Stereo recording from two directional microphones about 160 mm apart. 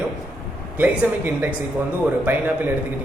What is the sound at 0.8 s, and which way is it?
Speech, 10° right (ahead or behind).